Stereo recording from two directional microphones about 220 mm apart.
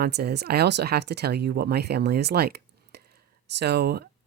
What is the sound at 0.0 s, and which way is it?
Speech, 45° right (ahead or behind).